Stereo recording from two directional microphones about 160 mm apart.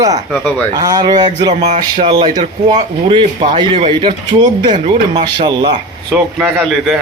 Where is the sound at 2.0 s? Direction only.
25° right (ahead or behind).